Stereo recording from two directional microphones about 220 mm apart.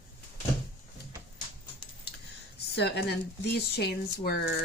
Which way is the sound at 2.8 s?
50° left (ahead or behind).